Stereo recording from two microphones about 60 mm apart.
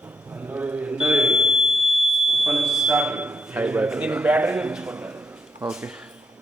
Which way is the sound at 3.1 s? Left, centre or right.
Right.